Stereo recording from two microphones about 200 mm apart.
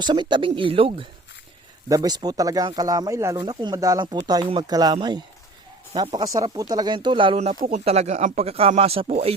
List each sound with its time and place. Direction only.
0.0 s speech: 20° right (ahead or behind)